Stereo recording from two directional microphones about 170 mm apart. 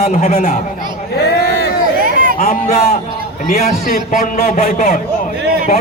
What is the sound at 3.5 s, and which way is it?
A man's voice, 60° left (ahead or behind).